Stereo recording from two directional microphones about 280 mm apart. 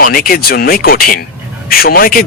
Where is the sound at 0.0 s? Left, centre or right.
Left.